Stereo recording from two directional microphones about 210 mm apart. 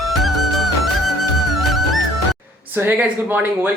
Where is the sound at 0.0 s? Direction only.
Centre (ahead or behind).